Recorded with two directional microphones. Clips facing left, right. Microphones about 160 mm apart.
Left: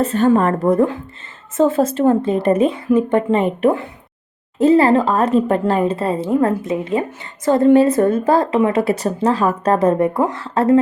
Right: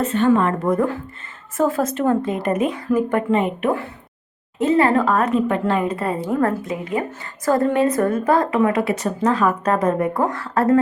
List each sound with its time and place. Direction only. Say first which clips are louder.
0.0 s a woman's voice: left 2 dB; 35° left (ahead or behind)